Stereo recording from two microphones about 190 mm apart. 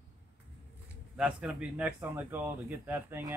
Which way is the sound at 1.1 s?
5° right (ahead or behind).